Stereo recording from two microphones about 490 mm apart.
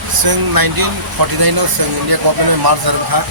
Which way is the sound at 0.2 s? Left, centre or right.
Right.